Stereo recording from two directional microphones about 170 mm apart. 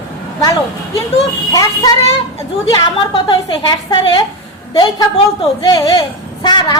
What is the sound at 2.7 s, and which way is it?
A woman's voice, 25° left (ahead or behind).